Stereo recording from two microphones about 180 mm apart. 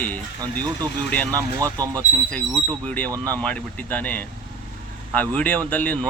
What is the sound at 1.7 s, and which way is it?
Speech, 20° right (ahead or behind).